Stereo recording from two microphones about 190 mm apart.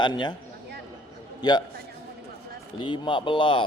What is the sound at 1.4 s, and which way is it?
Speech, 20° left (ahead or behind).